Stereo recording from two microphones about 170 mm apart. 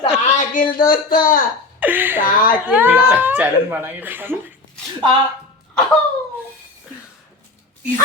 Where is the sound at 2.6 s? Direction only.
10° right (ahead or behind).